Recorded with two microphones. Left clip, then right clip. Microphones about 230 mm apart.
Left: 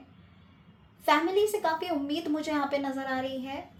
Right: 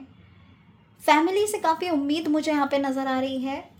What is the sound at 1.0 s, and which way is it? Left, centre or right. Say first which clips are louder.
A woman's voice: right 4 dB; right.